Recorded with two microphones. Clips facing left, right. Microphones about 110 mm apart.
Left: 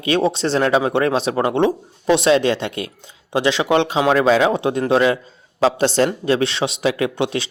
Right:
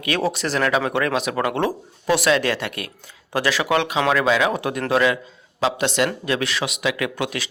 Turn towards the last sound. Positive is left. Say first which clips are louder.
# left 5 dB
turn(degrees=25)  # may be behind; listen again after turning